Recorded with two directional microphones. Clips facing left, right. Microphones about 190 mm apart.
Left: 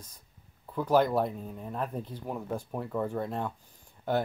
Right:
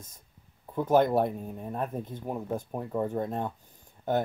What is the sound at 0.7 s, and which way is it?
Speech, 25° right (ahead or behind).